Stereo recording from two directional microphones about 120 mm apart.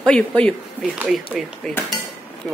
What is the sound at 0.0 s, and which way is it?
Speech, 10° left (ahead or behind).